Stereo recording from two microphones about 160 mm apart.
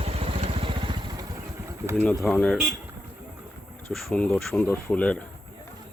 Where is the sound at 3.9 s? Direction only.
5° left (ahead or behind).